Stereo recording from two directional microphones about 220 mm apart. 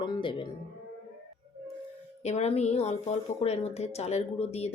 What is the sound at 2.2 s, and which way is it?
Speech, 30° left (ahead or behind).